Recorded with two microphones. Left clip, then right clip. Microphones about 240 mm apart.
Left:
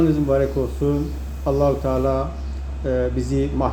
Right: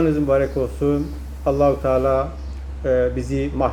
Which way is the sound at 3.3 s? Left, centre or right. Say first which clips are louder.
Even; centre.